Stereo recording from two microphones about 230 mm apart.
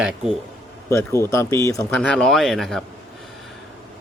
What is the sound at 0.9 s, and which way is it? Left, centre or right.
Speech, centre.